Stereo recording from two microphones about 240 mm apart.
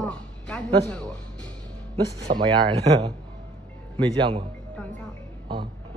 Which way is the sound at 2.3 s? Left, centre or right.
Centre.